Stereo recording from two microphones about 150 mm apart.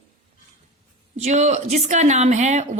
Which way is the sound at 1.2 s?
50° right (ahead or behind).